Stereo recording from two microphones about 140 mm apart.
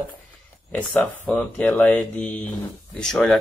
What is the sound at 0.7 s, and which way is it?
Speech, 10° left (ahead or behind).